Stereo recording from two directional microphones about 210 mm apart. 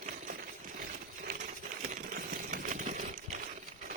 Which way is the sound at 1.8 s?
40° right (ahead or behind).